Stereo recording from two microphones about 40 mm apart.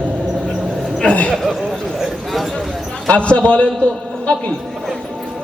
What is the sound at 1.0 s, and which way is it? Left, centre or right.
Speech, left.